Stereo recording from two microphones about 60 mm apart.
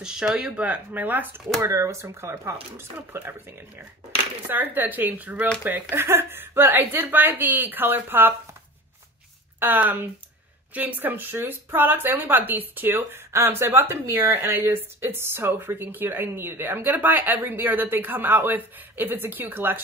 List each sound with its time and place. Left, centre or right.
0.0 s speech: centre
0.7 s speech: right
1.6 s speech: right
3.1 s speech: right
9.6 s speech: right